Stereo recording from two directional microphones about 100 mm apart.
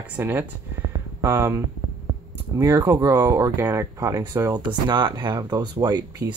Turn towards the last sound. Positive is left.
turn(degrees=-40)  # may be behind; listen again after turning